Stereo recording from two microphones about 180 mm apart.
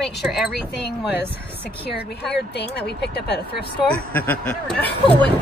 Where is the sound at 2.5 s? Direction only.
65° left (ahead or behind).